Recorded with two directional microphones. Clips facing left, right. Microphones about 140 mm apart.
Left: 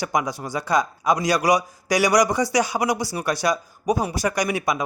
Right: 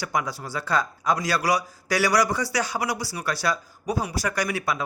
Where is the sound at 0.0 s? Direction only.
15° left (ahead or behind).